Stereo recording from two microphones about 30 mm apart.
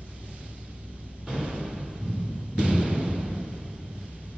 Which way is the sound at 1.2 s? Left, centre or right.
Right.